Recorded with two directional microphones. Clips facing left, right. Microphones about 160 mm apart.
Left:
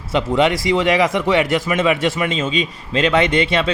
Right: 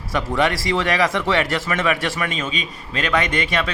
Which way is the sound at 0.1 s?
20° left (ahead or behind).